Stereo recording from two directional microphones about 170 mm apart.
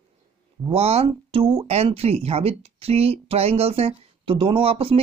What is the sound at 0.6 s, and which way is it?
Speech, 35° right (ahead or behind).